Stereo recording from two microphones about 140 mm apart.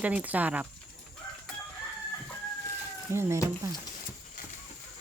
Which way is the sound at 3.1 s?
20° right (ahead or behind).